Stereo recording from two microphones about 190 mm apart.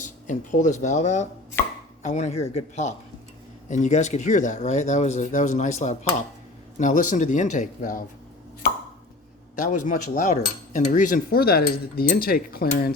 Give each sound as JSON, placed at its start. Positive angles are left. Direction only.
{"t": 0.0, "sound": "speech", "side_deg": 40}
{"t": 1.6, "sound": "chopping", "side_deg": 10}
{"t": 2.0, "sound": "speech", "side_deg": 35}
{"t": 9.6, "sound": "speech", "side_deg": 40}